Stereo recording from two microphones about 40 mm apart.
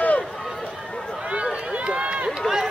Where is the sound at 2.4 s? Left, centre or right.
Centre.